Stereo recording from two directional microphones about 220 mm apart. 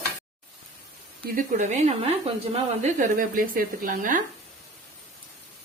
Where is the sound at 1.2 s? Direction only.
35° right (ahead or behind).